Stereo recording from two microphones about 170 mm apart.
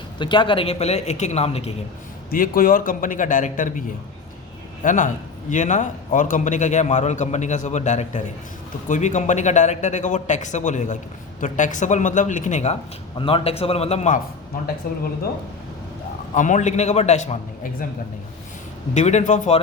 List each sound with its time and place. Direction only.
0.2 s a man's voice: 30° left (ahead or behind)
2.3 s a man's voice: 55° left (ahead or behind)
13.1 s a man's voice: 30° left (ahead or behind)
14.8 s speech: 60° left (ahead or behind)
16.3 s a man's voice: 45° left (ahead or behind)
18.9 s a man's voice: 45° left (ahead or behind)